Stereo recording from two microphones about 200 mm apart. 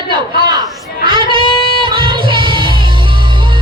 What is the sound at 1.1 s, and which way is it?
Child singing, 25° right (ahead or behind).